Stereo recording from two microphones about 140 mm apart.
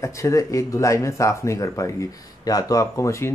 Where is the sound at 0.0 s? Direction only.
20° left (ahead or behind).